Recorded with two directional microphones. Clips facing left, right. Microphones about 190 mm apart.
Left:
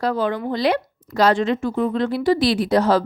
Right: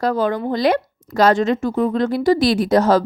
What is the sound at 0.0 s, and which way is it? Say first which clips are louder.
A woman's voice: right 2 dB; 45° right (ahead or behind).